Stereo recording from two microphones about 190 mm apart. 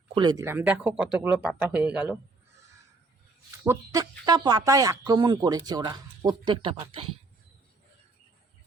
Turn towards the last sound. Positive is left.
turn(degrees=-30)  # may be behind; listen again after turning